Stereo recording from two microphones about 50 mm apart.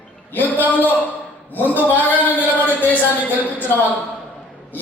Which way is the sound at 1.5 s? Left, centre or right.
Left.